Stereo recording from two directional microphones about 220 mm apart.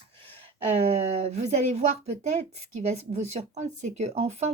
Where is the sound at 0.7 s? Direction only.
30° right (ahead or behind).